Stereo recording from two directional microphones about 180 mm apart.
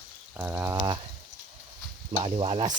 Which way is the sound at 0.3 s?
10° right (ahead or behind).